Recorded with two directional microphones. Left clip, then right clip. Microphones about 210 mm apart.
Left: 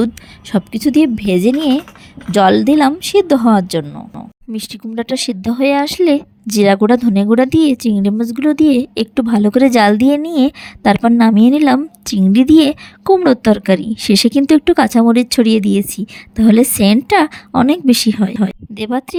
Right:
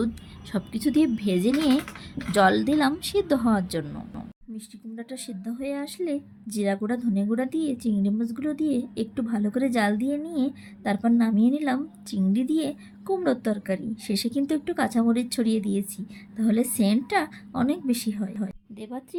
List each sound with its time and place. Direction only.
0.5 s speech: 35° left (ahead or behind)
3.8 s speech: 25° left (ahead or behind)
4.5 s speech: 45° left (ahead or behind)